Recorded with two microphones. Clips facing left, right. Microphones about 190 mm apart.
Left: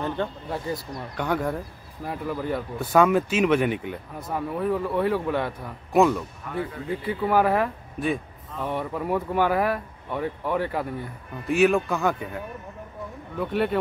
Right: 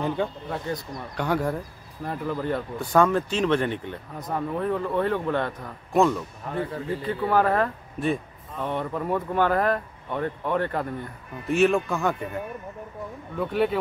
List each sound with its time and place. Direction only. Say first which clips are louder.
0.5 s a man's voice: even; 5° left (ahead or behind)
2.0 s a man's voice: right 1 dB; 5° left (ahead or behind)
6.4 s speech: right 1 dB; 35° right (ahead or behind)
7.1 s a man's voice: left 1 dB; 10° left (ahead or behind)
13.4 s a man's voice: right 1 dB; centre (ahead or behind)